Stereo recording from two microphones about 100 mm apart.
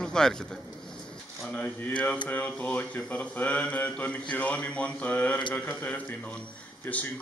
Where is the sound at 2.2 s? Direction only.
15° left (ahead or behind).